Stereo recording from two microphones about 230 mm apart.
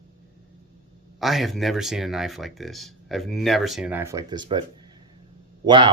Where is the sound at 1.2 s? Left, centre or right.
Centre.